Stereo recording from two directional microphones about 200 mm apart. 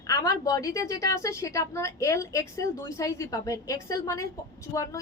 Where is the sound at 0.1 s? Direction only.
15° left (ahead or behind).